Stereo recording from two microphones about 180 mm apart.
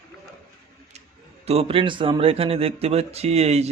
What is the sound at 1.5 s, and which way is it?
Speech, 30° right (ahead or behind).